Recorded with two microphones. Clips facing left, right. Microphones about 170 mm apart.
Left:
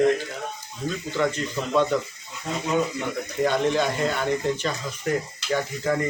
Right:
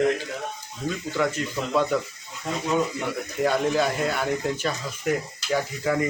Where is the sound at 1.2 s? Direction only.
5° right (ahead or behind).